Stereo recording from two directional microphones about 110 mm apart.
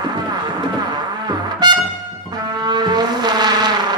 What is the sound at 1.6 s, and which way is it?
Music, 40° right (ahead or behind).